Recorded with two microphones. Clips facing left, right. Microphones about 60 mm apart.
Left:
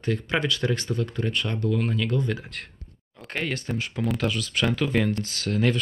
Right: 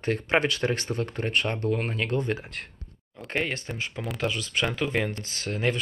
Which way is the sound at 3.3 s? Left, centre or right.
Centre.